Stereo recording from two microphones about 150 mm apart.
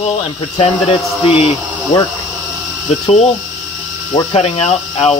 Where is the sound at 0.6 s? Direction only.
40° left (ahead or behind).